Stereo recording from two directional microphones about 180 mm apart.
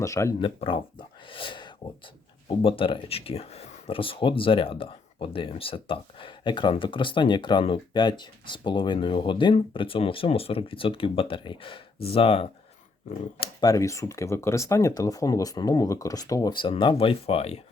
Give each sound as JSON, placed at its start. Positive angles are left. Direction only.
{"t": 0.0, "sound": "speech", "side_deg": 15}
{"t": 0.3, "sound": "speech", "side_deg": 30}
{"t": 13.6, "sound": "speech", "side_deg": 20}